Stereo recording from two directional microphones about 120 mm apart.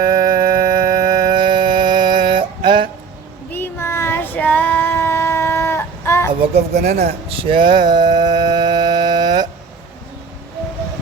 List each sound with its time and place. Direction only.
0.0 s a sound: 35° right (ahead or behind)
3.5 s child singing: 20° left (ahead or behind)
6.5 s speech: 70° right (ahead or behind)
7.3 s mantra: 45° right (ahead or behind)